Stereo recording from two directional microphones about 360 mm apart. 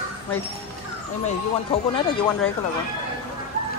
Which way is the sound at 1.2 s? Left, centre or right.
Centre.